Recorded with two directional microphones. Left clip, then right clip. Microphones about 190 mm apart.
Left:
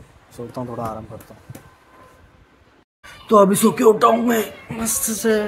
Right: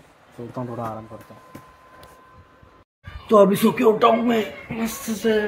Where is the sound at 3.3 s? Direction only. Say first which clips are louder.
Left 2 dB; 15° left (ahead or behind).